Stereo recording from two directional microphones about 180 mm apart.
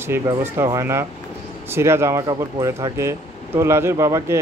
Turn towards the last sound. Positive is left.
turn(degrees=-15)  # may be behind; listen again after turning